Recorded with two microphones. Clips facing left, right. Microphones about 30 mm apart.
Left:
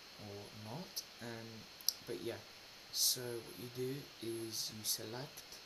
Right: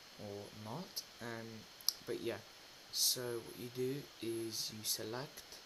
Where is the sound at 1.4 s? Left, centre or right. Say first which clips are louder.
Right 1 dB; centre.